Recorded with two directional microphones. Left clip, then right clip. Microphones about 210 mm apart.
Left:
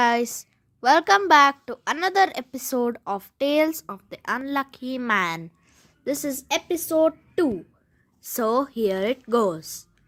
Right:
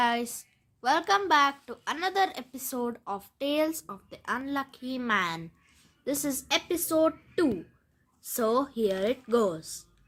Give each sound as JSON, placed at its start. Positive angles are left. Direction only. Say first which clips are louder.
{"t": 0.0, "sound": "a woman's voice", "louder": "left 6 dB", "side_deg": 30}